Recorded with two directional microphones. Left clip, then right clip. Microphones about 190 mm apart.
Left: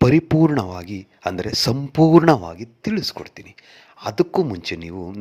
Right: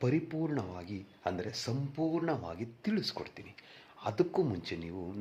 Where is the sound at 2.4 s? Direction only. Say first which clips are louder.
Left 10 dB; 30° left (ahead or behind).